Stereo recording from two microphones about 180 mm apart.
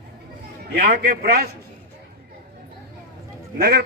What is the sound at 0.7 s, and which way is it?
Speech, 60° right (ahead or behind).